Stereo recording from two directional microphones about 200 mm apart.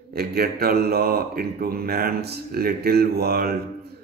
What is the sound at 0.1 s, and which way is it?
Speech, 50° right (ahead or behind).